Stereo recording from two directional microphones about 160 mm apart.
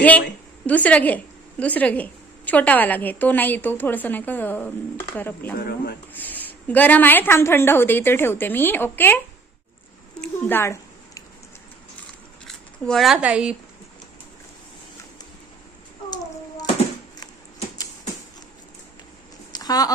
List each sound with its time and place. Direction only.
0.7 s a woman's voice: 10° left (ahead or behind)
5.5 s speech: 75° left (ahead or behind)
6.1 s a woman's voice: 10° left (ahead or behind)
10.2 s a sound: 15° left (ahead or behind)
12.5 s speech: 5° left (ahead or behind)
16.0 s child singing: 25° left (ahead or behind)
19.5 s a sound: 25° left (ahead or behind)